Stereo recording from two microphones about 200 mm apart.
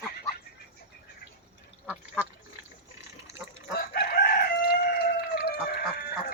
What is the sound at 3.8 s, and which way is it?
Chicken, 50° left (ahead or behind).